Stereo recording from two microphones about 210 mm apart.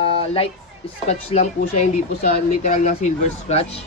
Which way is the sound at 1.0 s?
35° left (ahead or behind).